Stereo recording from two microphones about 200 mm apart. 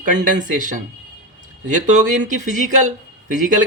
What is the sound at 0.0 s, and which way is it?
Speech, 40° right (ahead or behind).